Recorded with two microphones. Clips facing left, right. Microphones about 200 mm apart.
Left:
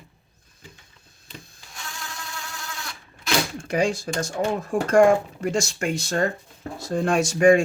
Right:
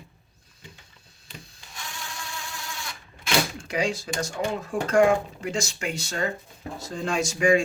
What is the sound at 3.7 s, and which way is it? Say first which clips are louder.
Speech: left 4 dB; 50° left (ahead or behind).